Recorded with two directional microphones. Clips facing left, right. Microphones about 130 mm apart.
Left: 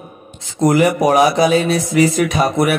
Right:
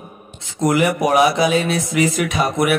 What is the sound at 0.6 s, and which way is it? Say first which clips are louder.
A man's voice: left 4 dB; 35° left (ahead or behind).